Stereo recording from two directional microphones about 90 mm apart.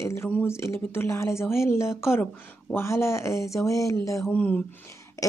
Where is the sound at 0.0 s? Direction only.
30° left (ahead or behind).